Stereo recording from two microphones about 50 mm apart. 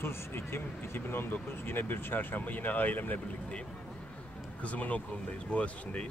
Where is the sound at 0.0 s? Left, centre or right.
Left.